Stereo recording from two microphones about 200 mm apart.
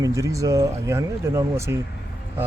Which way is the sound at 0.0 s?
15° right (ahead or behind).